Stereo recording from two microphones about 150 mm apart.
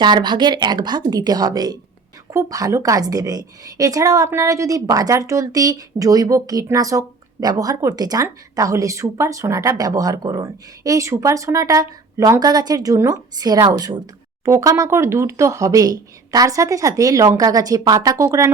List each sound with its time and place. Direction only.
0.0 s a woman's voice: 30° right (ahead or behind)